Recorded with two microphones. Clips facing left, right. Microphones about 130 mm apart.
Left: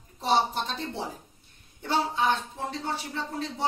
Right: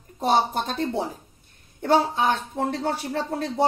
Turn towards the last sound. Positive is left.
turn(degrees=-60)  # may be behind; listen again after turning